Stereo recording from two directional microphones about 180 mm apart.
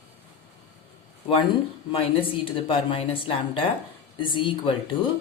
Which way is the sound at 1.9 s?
30° left (ahead or behind).